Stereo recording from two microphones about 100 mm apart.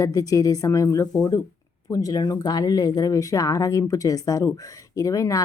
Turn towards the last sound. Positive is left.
turn(degrees=35)  # may be behind; listen again after turning